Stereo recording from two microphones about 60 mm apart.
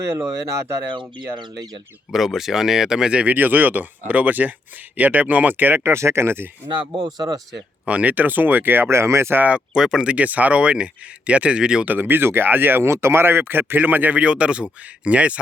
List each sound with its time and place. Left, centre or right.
0.0 s speech: right
2.1 s speech: centre
3.3 s speech: right
7.0 s speech: right
7.9 s speech: right
9.4 s speech: right
9.7 s speech: centre
11.9 s speech: right